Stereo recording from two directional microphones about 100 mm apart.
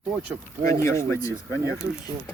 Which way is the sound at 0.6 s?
25° left (ahead or behind).